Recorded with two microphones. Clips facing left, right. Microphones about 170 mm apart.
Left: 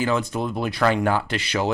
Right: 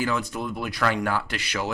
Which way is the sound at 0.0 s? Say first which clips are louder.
Left 4 dB; 25° left (ahead or behind).